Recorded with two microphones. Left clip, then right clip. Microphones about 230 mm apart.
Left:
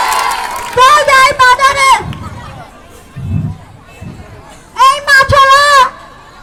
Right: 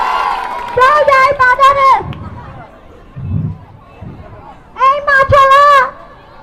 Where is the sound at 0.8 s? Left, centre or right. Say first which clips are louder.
Left 2 dB; left.